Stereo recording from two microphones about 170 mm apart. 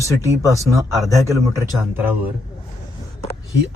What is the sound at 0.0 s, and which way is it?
Speech, 20° right (ahead or behind).